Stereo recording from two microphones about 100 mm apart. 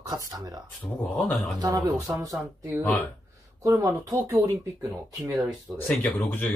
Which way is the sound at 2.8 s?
15° left (ahead or behind).